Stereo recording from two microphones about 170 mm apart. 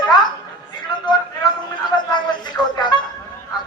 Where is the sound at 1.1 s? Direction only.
25° left (ahead or behind).